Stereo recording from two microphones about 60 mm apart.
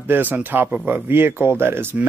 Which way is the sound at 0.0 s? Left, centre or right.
Right.